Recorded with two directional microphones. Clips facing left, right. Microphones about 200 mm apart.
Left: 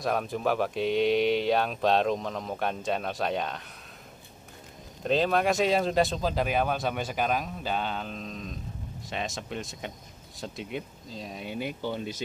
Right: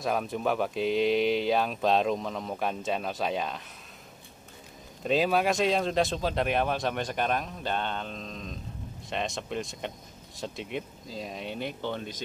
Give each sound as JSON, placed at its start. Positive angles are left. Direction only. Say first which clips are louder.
{"t": 0.0, "sound": "speech", "louder": "left 1 dB", "side_deg": 0}
{"t": 5.0, "sound": "speech", "louder": "even", "side_deg": -5}